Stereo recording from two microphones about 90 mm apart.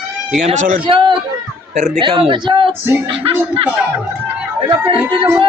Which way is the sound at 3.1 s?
85° right.